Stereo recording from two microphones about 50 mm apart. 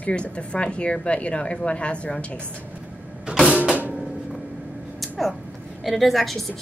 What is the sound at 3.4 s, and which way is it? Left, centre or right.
Mechanisms, right.